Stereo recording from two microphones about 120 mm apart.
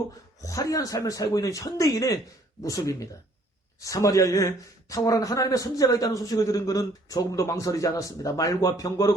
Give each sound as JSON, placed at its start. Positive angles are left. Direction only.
{"t": 0.4, "sound": "speech", "side_deg": 30}